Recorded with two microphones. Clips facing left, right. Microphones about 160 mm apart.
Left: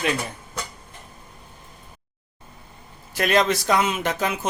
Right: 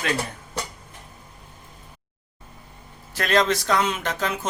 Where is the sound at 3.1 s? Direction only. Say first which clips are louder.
Left 1 dB; 10° left (ahead or behind).